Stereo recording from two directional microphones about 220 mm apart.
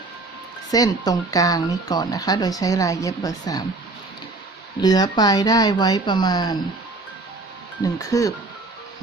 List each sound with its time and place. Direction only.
0.7 s speech: 15° left (ahead or behind)
4.8 s speech: 20° left (ahead or behind)
7.9 s speech: 15° left (ahead or behind)